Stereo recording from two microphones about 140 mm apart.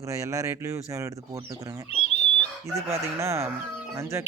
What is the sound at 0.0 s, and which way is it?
Speech, 20° right (ahead or behind).